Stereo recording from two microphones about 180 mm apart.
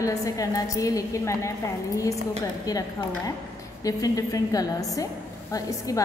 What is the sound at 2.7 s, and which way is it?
A woman's voice, 20° left (ahead or behind).